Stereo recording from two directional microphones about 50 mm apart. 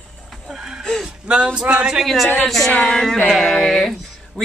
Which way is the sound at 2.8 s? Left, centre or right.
Centre.